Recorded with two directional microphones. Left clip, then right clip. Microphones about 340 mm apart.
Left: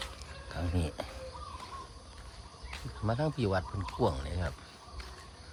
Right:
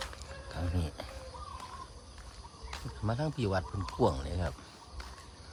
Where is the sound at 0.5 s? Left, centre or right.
Centre.